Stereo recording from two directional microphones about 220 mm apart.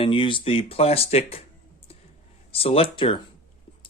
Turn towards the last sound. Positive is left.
turn(degrees=25)  # may be behind; listen again after turning